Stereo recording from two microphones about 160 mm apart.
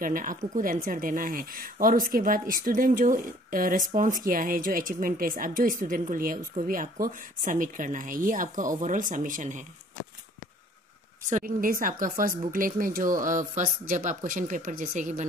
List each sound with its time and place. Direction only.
0.0 s speech: 60° right (ahead or behind)
11.2 s speech: 55° right (ahead or behind)